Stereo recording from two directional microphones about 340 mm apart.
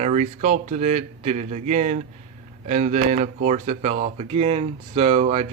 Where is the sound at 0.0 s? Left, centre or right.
Right.